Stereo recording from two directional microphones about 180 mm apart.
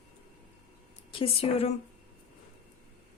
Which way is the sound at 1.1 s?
35° left (ahead or behind).